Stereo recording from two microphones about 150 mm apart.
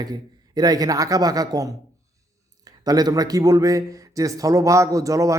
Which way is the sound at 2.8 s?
25° right (ahead or behind).